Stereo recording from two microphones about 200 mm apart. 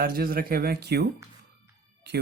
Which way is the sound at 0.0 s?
50° right (ahead or behind).